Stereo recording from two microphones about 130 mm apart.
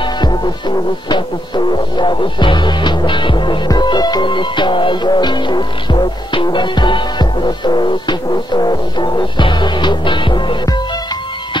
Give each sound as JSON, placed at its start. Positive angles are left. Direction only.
{"t": 0.0, "sound": "music", "side_deg": 35}